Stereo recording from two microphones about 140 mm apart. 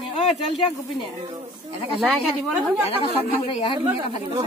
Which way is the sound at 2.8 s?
40° left (ahead or behind).